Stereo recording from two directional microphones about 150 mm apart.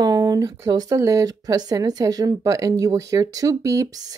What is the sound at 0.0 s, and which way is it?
Speech, 25° right (ahead or behind).